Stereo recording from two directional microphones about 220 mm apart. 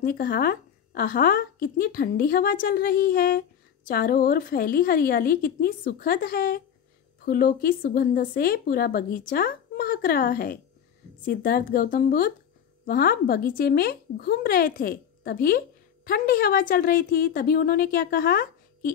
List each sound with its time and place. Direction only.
0.0 s a woman's voice: 40° left (ahead or behind)